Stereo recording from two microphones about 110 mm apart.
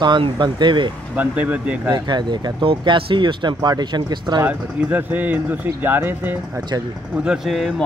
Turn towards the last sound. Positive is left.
turn(degrees=0)  # may be behind; listen again after turning